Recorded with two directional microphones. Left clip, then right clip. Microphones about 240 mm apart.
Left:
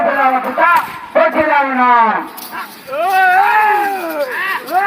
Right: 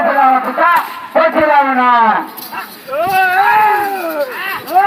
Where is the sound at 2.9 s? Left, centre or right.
Centre.